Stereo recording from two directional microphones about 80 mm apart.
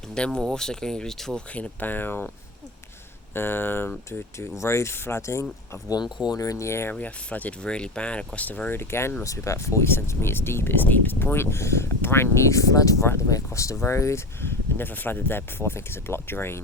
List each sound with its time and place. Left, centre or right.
0.4 s speech: centre
1.5 s speech: centre
3.3 s speech: left
6.2 s speech: left
6.9 s speech: centre
8.7 s speech: left